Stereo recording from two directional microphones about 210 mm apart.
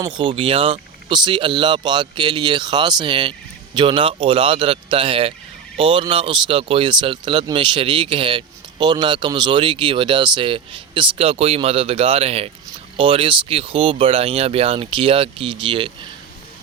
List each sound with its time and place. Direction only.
0.0 s speech: 25° right (ahead or behind)